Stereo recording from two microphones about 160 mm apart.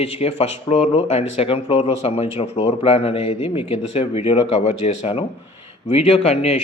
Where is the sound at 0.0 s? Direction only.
40° left (ahead or behind).